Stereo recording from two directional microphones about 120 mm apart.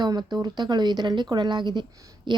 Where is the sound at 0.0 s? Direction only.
35° right (ahead or behind).